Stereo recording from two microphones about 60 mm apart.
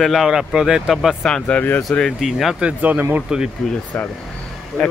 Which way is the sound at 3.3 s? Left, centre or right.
Centre.